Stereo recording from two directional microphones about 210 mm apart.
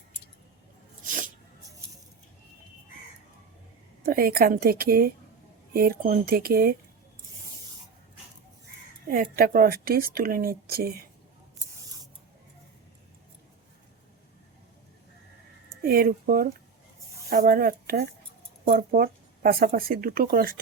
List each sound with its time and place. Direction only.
1.0 s sneeze: 40° right (ahead or behind)
4.0 s speech: 45° right (ahead or behind)
9.0 s speech: 45° right (ahead or behind)
15.8 s speech: 45° right (ahead or behind)